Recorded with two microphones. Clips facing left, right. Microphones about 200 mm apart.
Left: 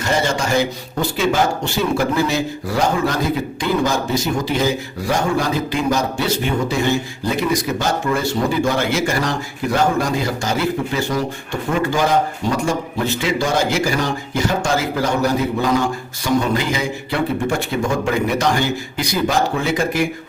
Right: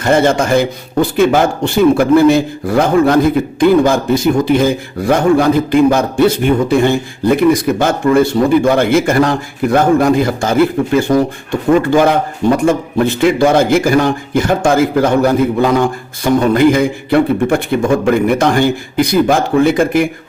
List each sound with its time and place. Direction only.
0.0 s a man's voice: 55° right (ahead or behind)